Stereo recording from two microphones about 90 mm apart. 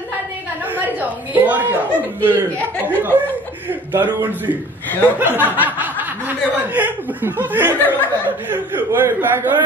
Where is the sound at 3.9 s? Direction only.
20° right (ahead or behind).